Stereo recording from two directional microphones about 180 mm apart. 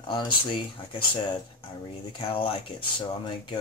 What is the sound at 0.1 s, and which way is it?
Speech, 25° left (ahead or behind).